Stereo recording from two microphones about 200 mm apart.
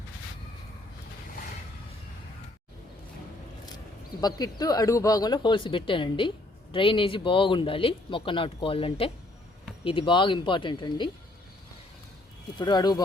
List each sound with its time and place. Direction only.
4.2 s speech: 20° left (ahead or behind)
12.5 s speech: 20° left (ahead or behind)